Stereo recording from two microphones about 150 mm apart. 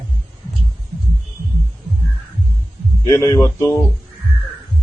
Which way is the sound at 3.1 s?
20° left (ahead or behind).